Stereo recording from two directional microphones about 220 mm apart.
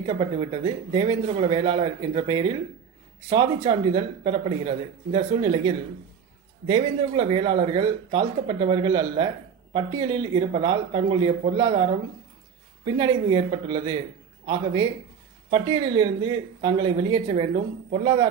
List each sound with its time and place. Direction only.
0.0 s speech: 25° right (ahead or behind)